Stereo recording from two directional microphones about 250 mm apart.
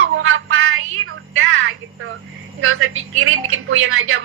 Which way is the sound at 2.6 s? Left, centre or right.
Right.